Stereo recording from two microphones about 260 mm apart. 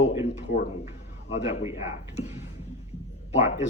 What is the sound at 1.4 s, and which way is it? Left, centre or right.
Speech, left.